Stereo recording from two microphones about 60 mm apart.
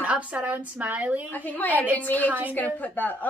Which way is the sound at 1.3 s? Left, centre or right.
Left.